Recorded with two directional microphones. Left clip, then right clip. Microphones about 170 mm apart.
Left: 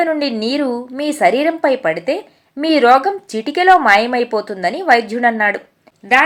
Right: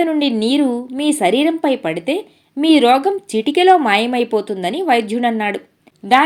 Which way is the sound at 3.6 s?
35° right (ahead or behind).